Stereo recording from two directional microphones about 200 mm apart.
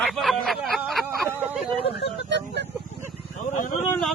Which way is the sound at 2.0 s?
55° left (ahead or behind).